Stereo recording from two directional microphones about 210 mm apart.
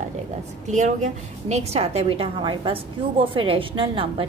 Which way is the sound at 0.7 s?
35° right (ahead or behind).